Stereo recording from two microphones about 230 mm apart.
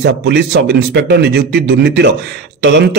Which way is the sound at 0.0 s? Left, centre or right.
Right.